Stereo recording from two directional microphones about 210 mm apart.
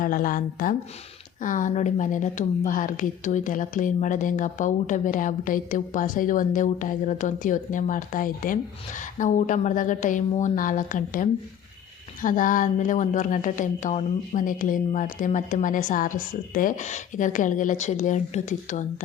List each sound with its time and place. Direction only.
0.0 s a woman's voice: 40° left (ahead or behind)